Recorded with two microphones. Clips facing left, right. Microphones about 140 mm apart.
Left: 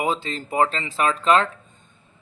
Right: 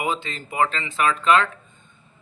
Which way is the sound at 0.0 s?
35° left (ahead or behind).